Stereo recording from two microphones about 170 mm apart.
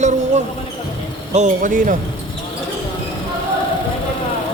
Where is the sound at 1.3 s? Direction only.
45° right (ahead or behind).